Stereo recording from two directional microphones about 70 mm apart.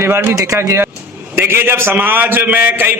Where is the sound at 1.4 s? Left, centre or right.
Right.